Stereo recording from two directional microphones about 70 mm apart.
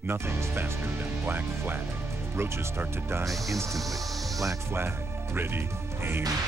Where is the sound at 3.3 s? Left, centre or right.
Centre.